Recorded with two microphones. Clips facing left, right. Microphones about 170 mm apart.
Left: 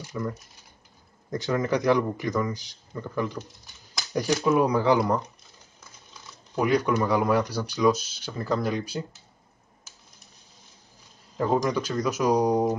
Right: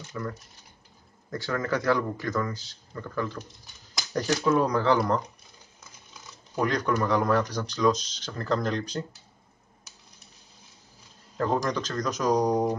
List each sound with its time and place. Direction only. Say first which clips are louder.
0.1 s speech: left 3 dB; 15° left (ahead or behind)
4.4 s speech: left 2 dB; 10° left (ahead or behind)
6.6 s speech: left 3 dB; 10° left (ahead or behind)
11.3 s speech: left 2 dB; 10° left (ahead or behind)